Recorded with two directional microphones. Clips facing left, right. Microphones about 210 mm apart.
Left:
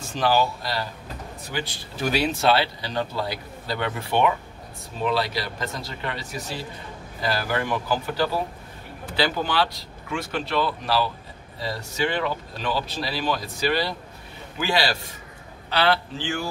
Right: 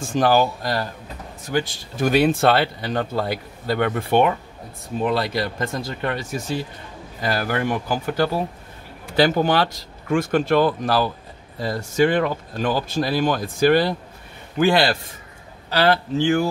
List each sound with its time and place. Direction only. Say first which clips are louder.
0.0 s speech: right 4 dB; 50° right (ahead or behind)